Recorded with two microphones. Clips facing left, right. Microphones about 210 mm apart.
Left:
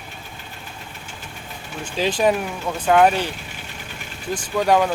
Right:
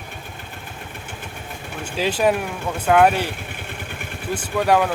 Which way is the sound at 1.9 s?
5° right (ahead or behind).